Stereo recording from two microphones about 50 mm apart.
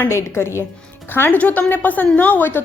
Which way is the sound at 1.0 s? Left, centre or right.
Left.